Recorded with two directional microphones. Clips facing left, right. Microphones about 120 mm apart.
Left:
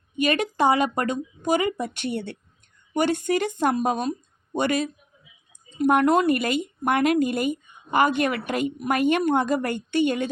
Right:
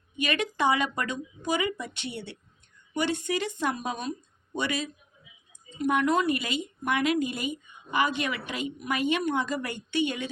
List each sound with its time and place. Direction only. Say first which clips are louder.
0.2 s speech: left 6 dB; 40° left (ahead or behind)